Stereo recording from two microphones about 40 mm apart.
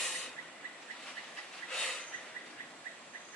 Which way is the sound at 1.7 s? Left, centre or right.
Centre.